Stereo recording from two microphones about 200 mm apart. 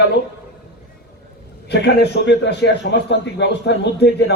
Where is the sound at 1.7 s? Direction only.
55° left (ahead or behind).